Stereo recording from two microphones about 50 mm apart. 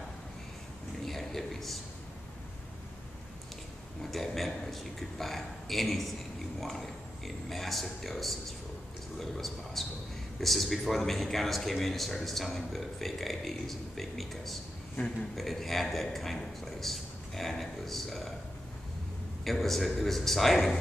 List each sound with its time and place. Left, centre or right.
1.0 s a sound: centre
4.0 s a man's voice: centre
15.0 s a man's voice: left
15.3 s a man's voice: centre
19.4 s a man's voice: centre